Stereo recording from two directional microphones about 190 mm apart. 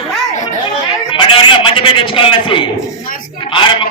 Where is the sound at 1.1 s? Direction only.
25° left (ahead or behind).